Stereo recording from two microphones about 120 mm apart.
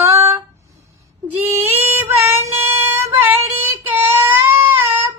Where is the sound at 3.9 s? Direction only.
20° right (ahead or behind).